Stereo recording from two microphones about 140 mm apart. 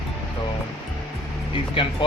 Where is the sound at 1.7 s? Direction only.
40° left (ahead or behind).